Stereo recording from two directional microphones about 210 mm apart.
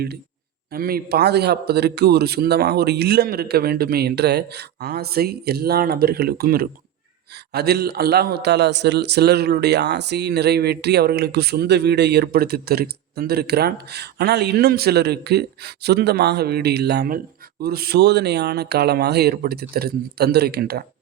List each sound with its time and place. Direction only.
0.7 s a man's voice: 45° right (ahead or behind)